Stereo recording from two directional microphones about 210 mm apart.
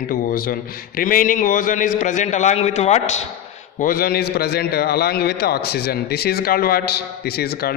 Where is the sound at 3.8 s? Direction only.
45° left (ahead or behind).